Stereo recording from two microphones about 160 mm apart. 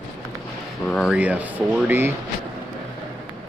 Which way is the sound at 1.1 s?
10° right (ahead or behind).